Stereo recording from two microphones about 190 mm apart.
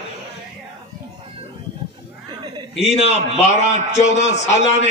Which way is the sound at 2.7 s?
35° left (ahead or behind).